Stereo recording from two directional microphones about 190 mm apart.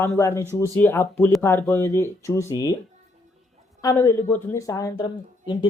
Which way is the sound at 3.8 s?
15° left (ahead or behind).